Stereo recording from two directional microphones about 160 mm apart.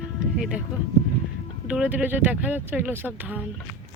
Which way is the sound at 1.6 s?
5° right (ahead or behind).